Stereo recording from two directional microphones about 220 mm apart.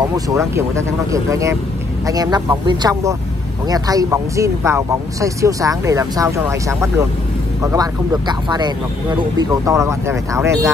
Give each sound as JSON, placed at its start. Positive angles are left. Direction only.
{"t": 0.3, "sound": "speech", "side_deg": -15}